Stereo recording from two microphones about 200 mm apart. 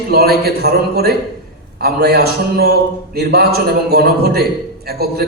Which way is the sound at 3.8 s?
55° right (ahead or behind).